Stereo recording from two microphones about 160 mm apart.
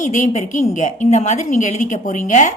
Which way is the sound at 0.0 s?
50° left (ahead or behind).